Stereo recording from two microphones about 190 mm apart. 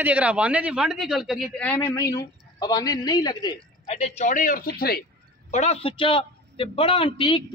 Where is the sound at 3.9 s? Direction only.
35° left (ahead or behind); by 5.0 s 55° left (ahead or behind).